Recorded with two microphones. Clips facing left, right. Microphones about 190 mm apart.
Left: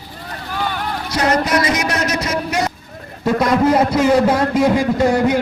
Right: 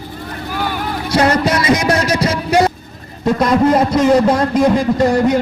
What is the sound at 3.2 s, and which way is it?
A man's voice, 5° left (ahead or behind).